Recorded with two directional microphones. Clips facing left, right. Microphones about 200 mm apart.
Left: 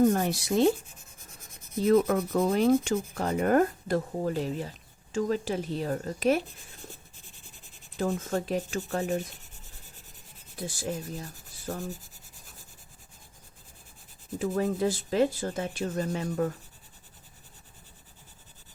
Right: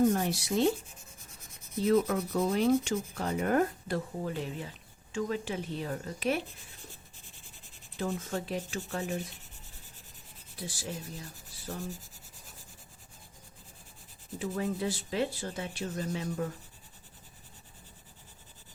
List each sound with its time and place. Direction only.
0.1 s speech: 50° left (ahead or behind)
1.9 s speech: 50° left (ahead or behind)
7.9 s speech: 45° left (ahead or behind)
10.6 s speech: 50° left (ahead or behind)
14.3 s speech: 45° left (ahead or behind)